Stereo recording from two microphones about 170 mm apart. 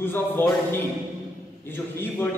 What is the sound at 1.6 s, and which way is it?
Speech, 10° left (ahead or behind).